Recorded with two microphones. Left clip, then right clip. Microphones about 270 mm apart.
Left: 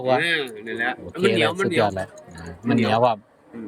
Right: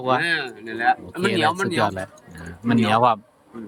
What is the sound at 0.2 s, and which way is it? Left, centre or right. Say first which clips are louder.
Speech: even; right.